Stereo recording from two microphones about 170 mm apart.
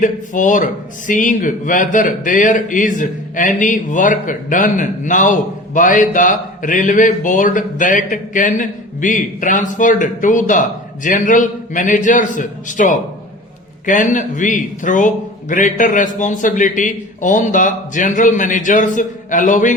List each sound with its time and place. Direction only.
0.0 s speech: 50° left (ahead or behind)